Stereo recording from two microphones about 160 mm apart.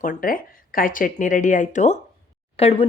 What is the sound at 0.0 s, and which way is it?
Speech, 55° left (ahead or behind).